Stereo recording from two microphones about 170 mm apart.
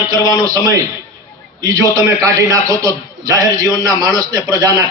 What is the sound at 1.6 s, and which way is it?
A man's voice, 20° right (ahead or behind).